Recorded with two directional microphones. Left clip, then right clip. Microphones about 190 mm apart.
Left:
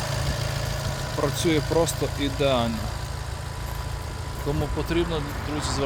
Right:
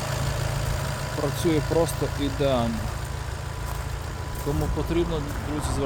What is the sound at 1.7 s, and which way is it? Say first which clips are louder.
Speech: left 1 dB; centre (ahead or behind).